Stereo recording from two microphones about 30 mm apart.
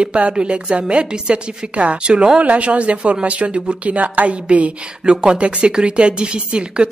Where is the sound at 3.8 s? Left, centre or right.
Right.